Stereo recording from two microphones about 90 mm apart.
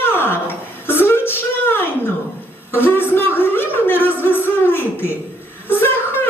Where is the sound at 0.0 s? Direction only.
25° left (ahead or behind).